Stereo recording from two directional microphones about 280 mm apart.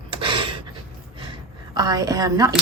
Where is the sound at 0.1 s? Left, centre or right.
Centre.